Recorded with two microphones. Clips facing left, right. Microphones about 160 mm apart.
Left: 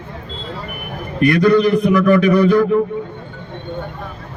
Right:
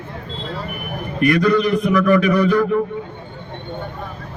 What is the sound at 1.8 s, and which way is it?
Speech, 15° left (ahead or behind).